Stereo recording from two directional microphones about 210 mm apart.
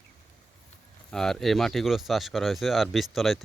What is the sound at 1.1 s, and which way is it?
Speech, centre (ahead or behind).